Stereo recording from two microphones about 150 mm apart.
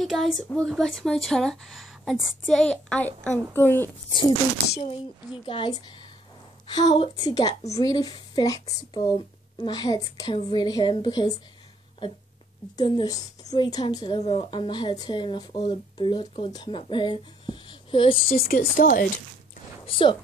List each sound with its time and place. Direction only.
0.0 s a woman's voice: centre (ahead or behind); by 3.9 s 15° left (ahead or behind)
5.4 s a woman's voice: 35° left (ahead or behind)
12.7 s a woman's voice: 30° left (ahead or behind)
18.3 s speech: 75° left (ahead or behind)
19.9 s speech: 35° left (ahead or behind)